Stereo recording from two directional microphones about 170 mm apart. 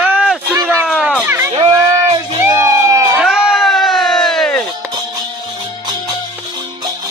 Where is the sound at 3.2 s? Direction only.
Centre (ahead or behind).